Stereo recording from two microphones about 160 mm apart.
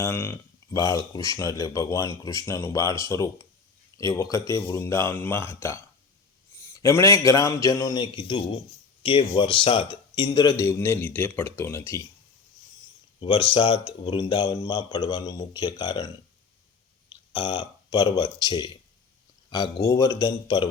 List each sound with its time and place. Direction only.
0.0 s speech: 15° left (ahead or behind)
13.2 s speech: 35° left (ahead or behind)
17.3 s speech: 30° left (ahead or behind)